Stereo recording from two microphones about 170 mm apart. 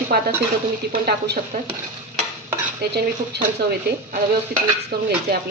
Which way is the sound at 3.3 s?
80° right.